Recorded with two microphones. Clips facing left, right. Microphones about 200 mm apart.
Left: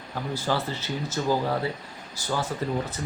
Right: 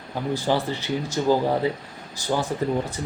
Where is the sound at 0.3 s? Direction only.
15° right (ahead or behind).